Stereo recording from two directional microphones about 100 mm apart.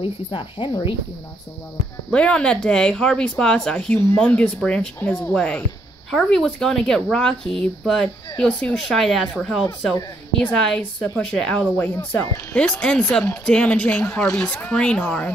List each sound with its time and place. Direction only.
0.0 s speech: 60° left (ahead or behind)
2.1 s speech: 10° left (ahead or behind)